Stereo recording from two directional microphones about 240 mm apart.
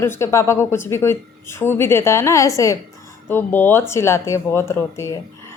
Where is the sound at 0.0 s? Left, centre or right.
Centre.